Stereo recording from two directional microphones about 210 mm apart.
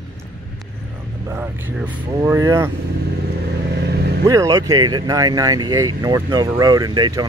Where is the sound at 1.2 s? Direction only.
10° right (ahead or behind).